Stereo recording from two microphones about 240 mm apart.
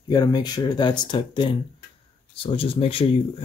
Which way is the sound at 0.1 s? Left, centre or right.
Centre.